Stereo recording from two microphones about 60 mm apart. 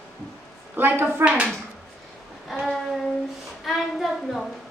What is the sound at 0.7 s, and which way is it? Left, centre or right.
Speech, right.